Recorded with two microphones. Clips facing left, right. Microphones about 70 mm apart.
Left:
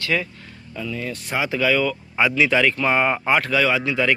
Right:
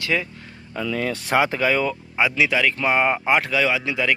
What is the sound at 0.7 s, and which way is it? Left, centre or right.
Speech, right.